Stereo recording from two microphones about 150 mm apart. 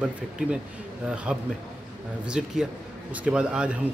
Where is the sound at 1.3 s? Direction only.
5° right (ahead or behind).